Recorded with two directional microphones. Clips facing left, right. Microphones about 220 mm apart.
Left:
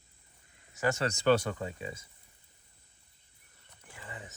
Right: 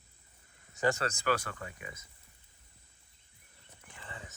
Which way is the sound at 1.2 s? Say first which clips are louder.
Left 8 dB; 25° left (ahead or behind).